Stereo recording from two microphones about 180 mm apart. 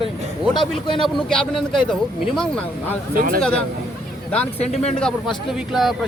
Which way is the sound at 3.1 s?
50° right (ahead or behind).